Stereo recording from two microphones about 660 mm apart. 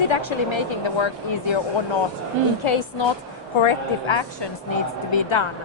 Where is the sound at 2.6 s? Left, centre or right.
Left.